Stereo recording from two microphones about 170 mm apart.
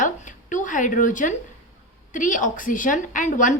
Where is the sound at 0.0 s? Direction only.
50° left (ahead or behind).